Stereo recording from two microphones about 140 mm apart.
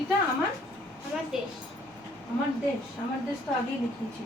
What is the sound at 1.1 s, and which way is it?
Speech, 5° right (ahead or behind).